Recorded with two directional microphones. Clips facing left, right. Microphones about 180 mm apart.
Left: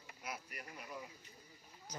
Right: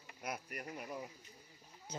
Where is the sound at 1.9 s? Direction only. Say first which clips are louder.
Right 4 dB; 25° right (ahead or behind).